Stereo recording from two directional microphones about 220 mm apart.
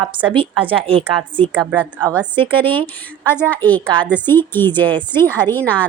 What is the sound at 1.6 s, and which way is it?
Speech, centre (ahead or behind).